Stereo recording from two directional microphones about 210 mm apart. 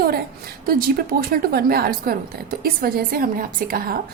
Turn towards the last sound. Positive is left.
turn(degrees=-45)  # may be behind; listen again after turning